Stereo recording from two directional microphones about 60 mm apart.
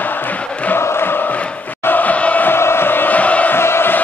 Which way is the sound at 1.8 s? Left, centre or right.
Left.